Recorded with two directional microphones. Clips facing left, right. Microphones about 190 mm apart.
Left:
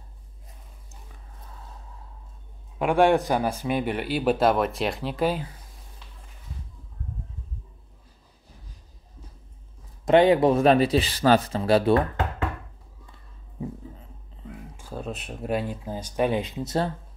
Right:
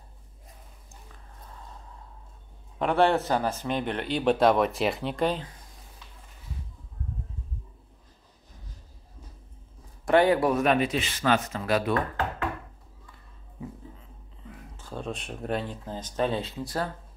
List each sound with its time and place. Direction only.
2.8 s a man's voice: 10° left (ahead or behind)
10.0 s speech: 20° left (ahead or behind)
14.8 s a man's voice: 5° left (ahead or behind); by 16.9 s 25° left (ahead or behind)